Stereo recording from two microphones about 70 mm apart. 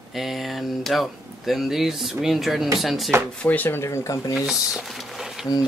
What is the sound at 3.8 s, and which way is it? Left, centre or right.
Speech, left.